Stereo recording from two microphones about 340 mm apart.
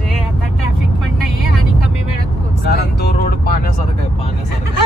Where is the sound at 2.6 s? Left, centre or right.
Left.